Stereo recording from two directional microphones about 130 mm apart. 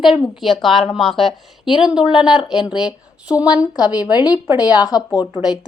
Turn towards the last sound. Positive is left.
turn(degrees=-5)  # may be behind; listen again after turning